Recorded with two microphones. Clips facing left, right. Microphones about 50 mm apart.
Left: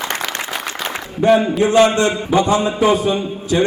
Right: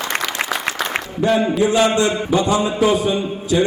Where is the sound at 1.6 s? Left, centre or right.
Left.